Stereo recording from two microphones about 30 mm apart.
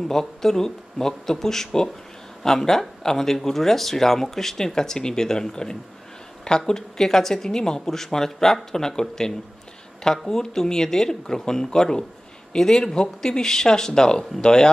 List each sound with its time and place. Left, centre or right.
0.1 s speech: centre